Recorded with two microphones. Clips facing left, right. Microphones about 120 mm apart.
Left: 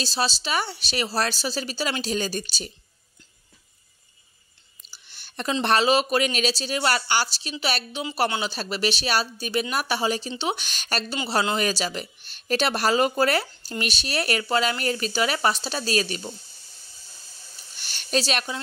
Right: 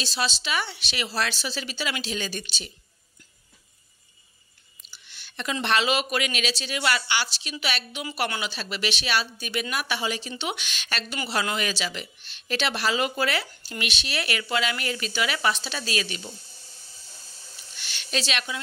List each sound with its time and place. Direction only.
0.0 s speech: 35° left (ahead or behind)
4.9 s speech: 40° left (ahead or behind)
17.7 s speech: 40° left (ahead or behind)